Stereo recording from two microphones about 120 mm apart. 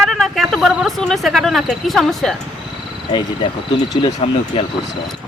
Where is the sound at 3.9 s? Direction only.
35° left (ahead or behind).